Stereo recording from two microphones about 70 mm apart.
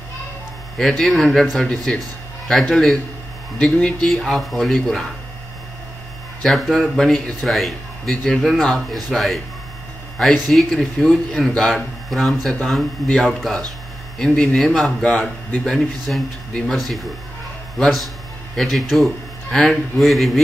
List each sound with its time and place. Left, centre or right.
0.7 s speech: centre
6.4 s speech: centre
18.6 s speech: centre